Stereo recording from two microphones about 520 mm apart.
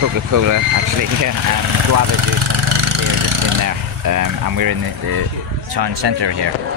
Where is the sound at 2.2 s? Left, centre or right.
Right.